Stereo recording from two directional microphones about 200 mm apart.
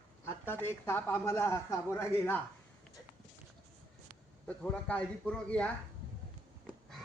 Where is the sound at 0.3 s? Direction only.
10° left (ahead or behind).